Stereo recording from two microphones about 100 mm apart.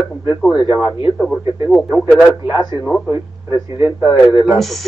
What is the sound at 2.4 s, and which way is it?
Speech, 25° right (ahead or behind).